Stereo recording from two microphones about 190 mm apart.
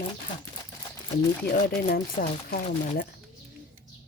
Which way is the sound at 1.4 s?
55° left (ahead or behind).